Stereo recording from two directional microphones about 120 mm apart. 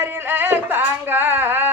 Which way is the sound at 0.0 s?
20° right (ahead or behind).